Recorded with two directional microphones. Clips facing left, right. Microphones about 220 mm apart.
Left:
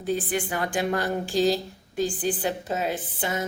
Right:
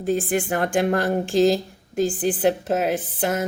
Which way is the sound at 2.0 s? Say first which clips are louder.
Right 5 dB; 65° right (ahead or behind).